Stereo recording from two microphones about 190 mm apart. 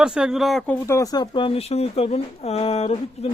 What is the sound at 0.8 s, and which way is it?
Speech, 15° left (ahead or behind).